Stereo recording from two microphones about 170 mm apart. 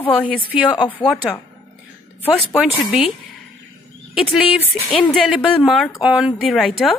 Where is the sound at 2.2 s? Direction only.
5° left (ahead or behind).